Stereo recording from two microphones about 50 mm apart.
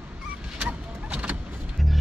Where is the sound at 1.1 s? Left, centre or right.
Right.